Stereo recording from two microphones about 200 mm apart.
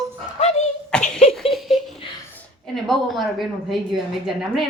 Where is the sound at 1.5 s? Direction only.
Centre (ahead or behind).